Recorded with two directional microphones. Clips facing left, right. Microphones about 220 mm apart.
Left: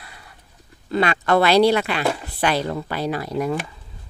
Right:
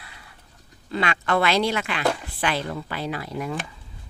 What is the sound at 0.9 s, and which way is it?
Speech, 40° left (ahead or behind).